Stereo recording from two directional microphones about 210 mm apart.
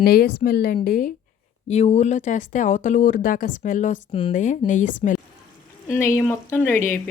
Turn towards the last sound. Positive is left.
turn(degrees=10)  # may be behind; listen again after turning